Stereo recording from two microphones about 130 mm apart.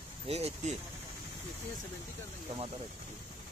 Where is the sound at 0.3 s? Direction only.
50° right (ahead or behind).